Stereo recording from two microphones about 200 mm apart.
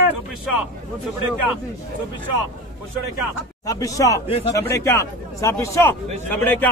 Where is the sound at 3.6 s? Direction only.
15° left (ahead or behind).